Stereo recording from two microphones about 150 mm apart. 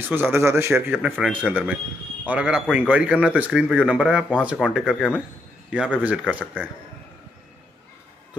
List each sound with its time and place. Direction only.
0.1 s speech: 15° right (ahead or behind)